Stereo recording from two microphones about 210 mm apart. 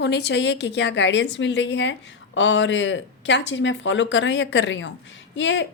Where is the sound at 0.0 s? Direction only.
55° left (ahead or behind).